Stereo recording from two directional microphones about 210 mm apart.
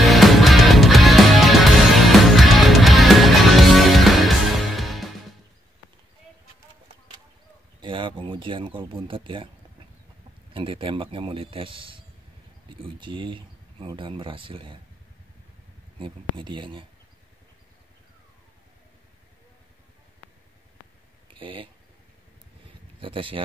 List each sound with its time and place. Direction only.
0.0 s music: centre (ahead or behind)
7.8 s speech: 25° right (ahead or behind)
10.5 s speech: 25° right (ahead or behind)
13.0 s speech: 25° right (ahead or behind)
16.0 s speech: 25° right (ahead or behind)
21.3 s speech: 25° right (ahead or behind)
22.9 s speech: 25° right (ahead or behind)